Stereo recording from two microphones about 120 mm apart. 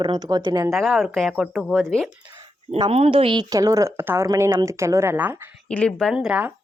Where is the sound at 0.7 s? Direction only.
Centre (ahead or behind).